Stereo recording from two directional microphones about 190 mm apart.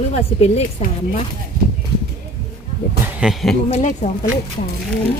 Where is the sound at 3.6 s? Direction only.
35° left (ahead or behind).